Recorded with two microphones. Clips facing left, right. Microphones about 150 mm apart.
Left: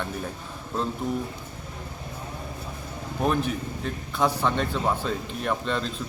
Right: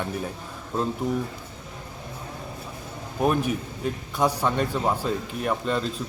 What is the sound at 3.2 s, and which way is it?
A man's voice, 10° right (ahead or behind).